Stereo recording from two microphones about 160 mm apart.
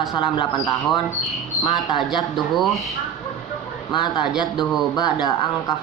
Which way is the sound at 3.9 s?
25° left (ahead or behind).